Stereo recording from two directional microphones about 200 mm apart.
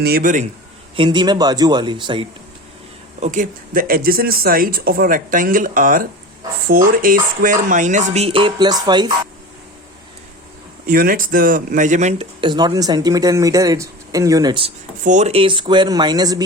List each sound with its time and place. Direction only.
0.0 s speech: 45° right (ahead or behind)
0.9 s speech: 25° right (ahead or behind)
3.2 s speech: 35° right (ahead or behind); by 9.1 s 20° right (ahead or behind)
10.8 s speech: 45° right (ahead or behind); by 14.7 s 20° right (ahead or behind)
15.0 s speech: 35° right (ahead or behind); by 16.4 s 20° right (ahead or behind)